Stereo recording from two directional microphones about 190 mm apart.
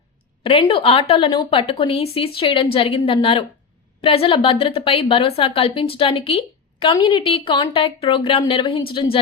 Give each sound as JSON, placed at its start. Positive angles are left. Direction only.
{"t": 0.4, "sound": "a woman's voice", "side_deg": 25}